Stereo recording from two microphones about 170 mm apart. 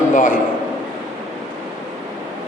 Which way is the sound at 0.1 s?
55° left (ahead or behind).